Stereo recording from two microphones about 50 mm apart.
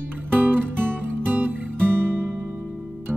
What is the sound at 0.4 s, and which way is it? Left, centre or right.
Music, right.